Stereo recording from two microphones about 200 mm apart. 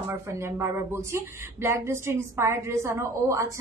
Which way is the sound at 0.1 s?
10° right (ahead or behind).